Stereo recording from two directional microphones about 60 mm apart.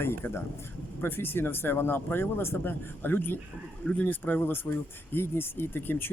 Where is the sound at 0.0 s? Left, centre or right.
Left.